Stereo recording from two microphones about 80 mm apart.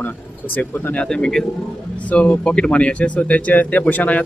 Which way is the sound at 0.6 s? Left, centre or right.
Left.